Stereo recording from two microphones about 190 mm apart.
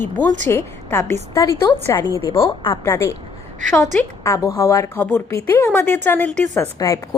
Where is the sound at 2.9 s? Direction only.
15° left (ahead or behind).